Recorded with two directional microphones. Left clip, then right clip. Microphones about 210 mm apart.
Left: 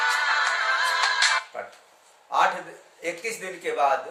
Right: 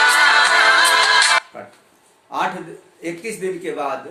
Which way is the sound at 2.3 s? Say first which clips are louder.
Left 1 dB; 5° left (ahead or behind).